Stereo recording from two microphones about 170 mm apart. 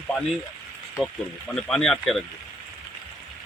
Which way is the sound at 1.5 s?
5° left (ahead or behind).